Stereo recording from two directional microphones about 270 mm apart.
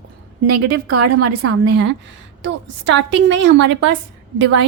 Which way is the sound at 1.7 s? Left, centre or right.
Right.